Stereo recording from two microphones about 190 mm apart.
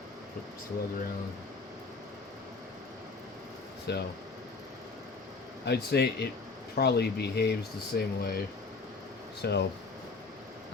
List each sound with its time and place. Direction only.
3.9 s speech: 60° left (ahead or behind)
5.6 s speech: 60° left (ahead or behind)
9.4 s speech: 60° left (ahead or behind)